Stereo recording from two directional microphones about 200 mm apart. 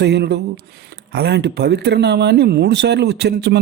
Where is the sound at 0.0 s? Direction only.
55° right (ahead or behind).